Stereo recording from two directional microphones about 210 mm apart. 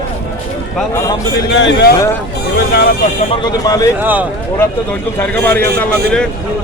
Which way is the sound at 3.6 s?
15° left (ahead or behind).